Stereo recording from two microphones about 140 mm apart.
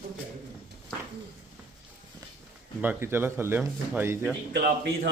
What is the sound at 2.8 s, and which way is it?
Speech, 15° right (ahead or behind).